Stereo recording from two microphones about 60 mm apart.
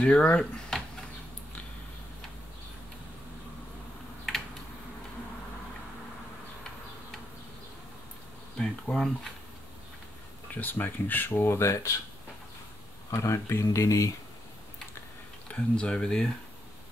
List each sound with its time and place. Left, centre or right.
0.0 s speech: centre
8.5 s speech: centre
10.5 s speech: left
13.1 s speech: left
13.7 s speech: left
15.5 s speech: centre